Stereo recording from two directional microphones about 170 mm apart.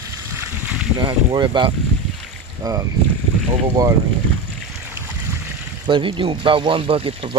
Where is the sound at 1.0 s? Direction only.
25° right (ahead or behind).